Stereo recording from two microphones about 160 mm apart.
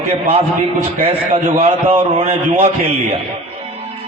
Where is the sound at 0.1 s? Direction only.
35° right (ahead or behind).